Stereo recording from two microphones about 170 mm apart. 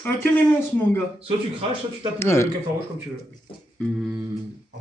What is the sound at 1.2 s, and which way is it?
Speech, 30° right (ahead or behind).